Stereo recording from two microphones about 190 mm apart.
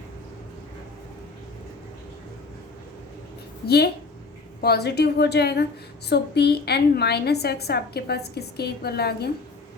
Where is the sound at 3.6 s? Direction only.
55° left (ahead or behind).